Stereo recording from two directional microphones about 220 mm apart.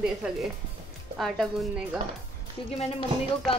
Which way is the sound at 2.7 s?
30° left (ahead or behind).